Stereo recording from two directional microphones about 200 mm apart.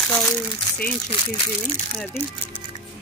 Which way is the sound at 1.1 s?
20° left (ahead or behind).